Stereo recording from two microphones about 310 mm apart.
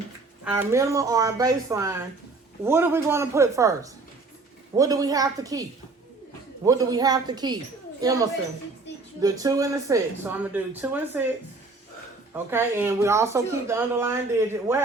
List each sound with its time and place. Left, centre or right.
0.4 s speech: centre
4.8 s speech: centre
6.7 s speech: centre
12.3 s speech: centre